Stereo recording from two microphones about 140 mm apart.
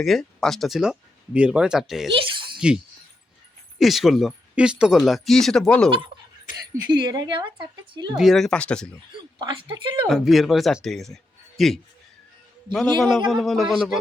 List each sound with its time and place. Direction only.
0.0 s speech: centre (ahead or behind)
2.1 s a sound: 35° right (ahead or behind)
2.6 s speech: 5° right (ahead or behind)
6.5 s speech: 80° left
6.9 s speech: 30° right (ahead or behind)
8.1 s speech: centre (ahead or behind)
9.4 s speech: 35° right (ahead or behind)
10.1 s speech: centre (ahead or behind)